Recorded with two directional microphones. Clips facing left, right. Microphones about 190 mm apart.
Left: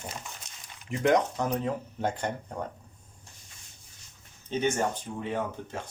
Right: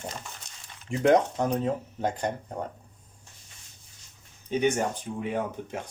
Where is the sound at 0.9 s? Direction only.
30° right (ahead or behind).